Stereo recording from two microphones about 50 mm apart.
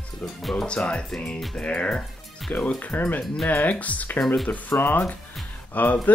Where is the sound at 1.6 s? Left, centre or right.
Left.